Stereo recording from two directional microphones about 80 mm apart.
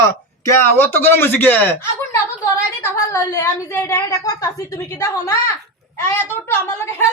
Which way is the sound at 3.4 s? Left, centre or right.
Left.